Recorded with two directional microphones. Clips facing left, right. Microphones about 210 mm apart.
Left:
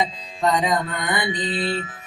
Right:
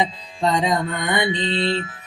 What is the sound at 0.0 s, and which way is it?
Music, 25° right (ahead or behind).